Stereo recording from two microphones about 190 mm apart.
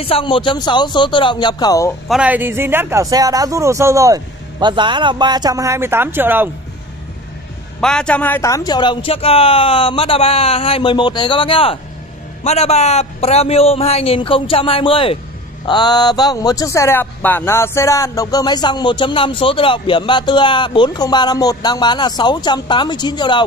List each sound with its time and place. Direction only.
0.0 s speech: 30° left (ahead or behind)
2.0 s a man's voice: 5° right (ahead or behind)
7.8 s a man's voice: 5° left (ahead or behind); by 23.4 s 25° left (ahead or behind)